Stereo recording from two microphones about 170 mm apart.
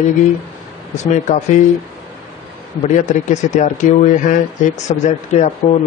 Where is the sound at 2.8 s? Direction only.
45° left (ahead or behind).